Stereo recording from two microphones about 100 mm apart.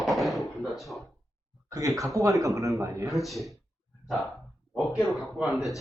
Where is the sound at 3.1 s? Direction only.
Centre (ahead or behind).